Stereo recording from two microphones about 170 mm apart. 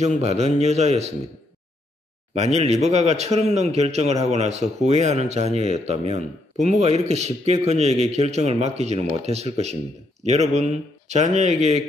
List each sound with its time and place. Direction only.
0.0 s a man's voice: 40° right (ahead or behind)
2.3 s a man's voice: 40° right (ahead or behind)